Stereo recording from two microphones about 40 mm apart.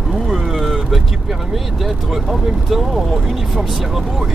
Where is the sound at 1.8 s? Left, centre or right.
Centre.